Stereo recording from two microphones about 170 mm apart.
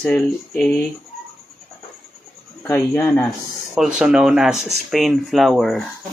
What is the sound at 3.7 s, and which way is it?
Speech, 5° right (ahead or behind).